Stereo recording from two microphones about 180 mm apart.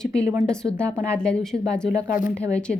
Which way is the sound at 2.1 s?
50° left (ahead or behind).